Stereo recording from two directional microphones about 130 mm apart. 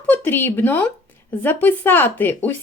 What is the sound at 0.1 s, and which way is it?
Speech, 15° left (ahead or behind).